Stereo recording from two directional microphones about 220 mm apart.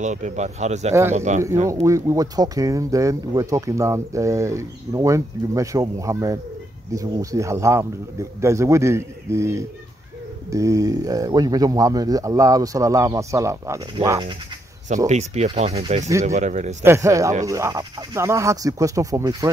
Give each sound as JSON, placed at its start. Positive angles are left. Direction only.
{"t": 0.0, "sound": "speech", "side_deg": -35}
{"t": 1.7, "sound": "speech", "side_deg": -15}
{"t": 15.0, "sound": "speech", "side_deg": -30}
{"t": 16.8, "sound": "speech", "side_deg": -10}